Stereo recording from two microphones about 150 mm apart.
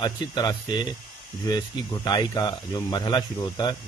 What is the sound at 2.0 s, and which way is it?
Speech, 25° left (ahead or behind).